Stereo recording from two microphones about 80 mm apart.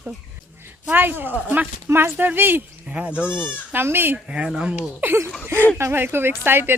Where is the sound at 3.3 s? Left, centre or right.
Left.